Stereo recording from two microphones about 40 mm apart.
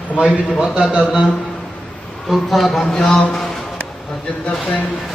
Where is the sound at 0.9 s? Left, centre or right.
Right.